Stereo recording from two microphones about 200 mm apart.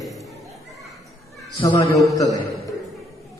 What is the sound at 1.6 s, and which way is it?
Speech, 25° left (ahead or behind).